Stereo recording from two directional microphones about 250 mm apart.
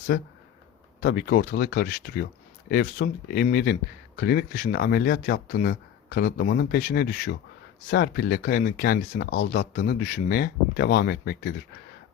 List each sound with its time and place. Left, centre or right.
0.1 s speech: left